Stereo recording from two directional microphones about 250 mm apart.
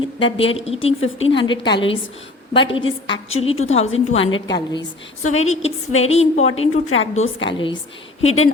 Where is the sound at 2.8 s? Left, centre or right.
Left.